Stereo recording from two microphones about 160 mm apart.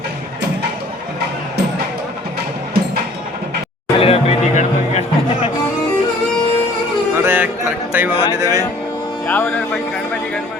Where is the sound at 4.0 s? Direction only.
40° left (ahead or behind).